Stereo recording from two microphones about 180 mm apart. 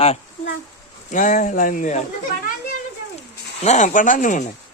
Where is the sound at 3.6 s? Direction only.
40° left (ahead or behind).